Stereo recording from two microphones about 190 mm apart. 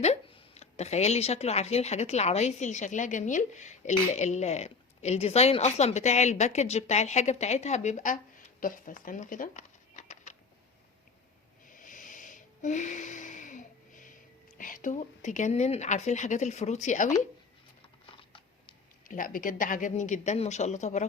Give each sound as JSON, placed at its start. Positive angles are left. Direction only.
{"t": 0.0, "sound": "speech", "side_deg": 35}
{"t": 11.8, "sound": "a sound", "side_deg": 45}
{"t": 14.6, "sound": "speech", "side_deg": 45}
{"t": 18.0, "sound": "typing", "side_deg": 25}
{"t": 19.0, "sound": "speech", "side_deg": 45}